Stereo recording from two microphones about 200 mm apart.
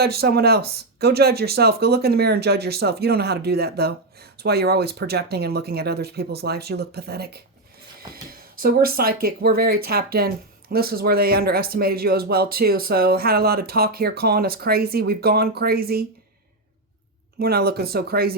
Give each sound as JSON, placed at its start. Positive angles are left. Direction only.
{"t": 0.0, "sound": "speech", "side_deg": -50}
{"t": 17.4, "sound": "speech", "side_deg": -50}